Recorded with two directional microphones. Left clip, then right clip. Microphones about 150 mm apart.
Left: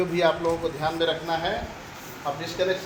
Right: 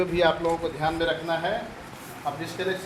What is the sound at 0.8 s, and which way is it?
Speech, 10° right (ahead or behind).